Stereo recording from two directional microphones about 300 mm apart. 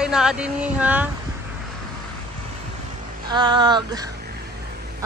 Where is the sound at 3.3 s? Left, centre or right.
Centre.